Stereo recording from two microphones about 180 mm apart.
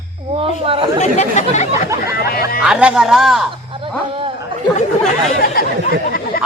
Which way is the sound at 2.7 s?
5° right (ahead or behind).